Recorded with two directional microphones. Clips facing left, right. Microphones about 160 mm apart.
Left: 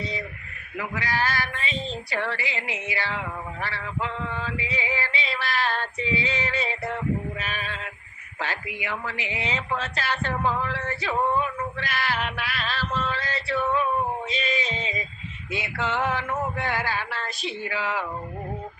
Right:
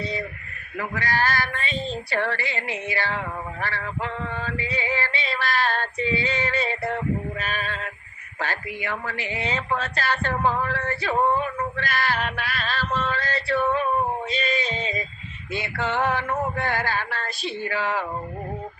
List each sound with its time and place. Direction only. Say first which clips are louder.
0.0 s a sound: right 3 dB; 35° right (ahead or behind)
0.8 s female singing: right 2 dB; 45° right (ahead or behind)
6.5 s male singing: right 3 dB; 35° right (ahead or behind)
7.3 s a sound: right 3 dB; 40° right (ahead or behind)
8.4 s speech: right 2 dB; 45° right (ahead or behind)
11.0 s male singing: right 2 dB; 40° right (ahead or behind)
15.5 s speech: right 2 dB; 35° right (ahead or behind)
17.2 s speech: right 2 dB; 35° right (ahead or behind)